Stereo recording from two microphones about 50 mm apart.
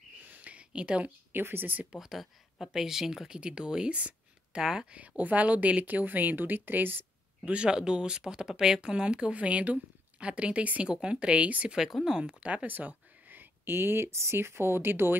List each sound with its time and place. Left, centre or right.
0.3 s a sound: right
1.3 s speech: right
1.9 s speech: centre
4.9 s speech: right
7.4 s speech: right
11.7 s speech: centre
12.2 s speech: right
12.6 s speech: right